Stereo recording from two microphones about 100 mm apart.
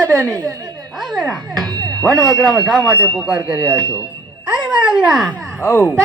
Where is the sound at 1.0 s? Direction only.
Centre (ahead or behind).